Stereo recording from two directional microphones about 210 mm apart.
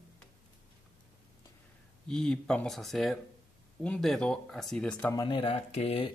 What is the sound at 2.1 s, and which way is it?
Speech, 5° left (ahead or behind).